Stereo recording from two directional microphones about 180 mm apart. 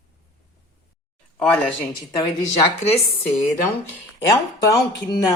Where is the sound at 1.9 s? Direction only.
25° left (ahead or behind).